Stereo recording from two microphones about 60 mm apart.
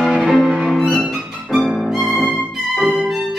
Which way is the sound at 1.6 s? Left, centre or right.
Centre.